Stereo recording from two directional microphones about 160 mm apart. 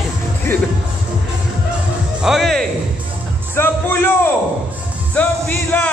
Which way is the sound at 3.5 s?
15° left (ahead or behind).